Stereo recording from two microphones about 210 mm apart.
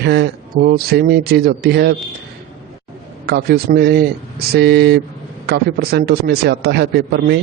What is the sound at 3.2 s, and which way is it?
A man's voice, 50° right (ahead or behind).